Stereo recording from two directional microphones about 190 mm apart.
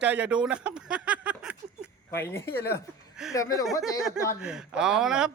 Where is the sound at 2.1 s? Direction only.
15° left (ahead or behind).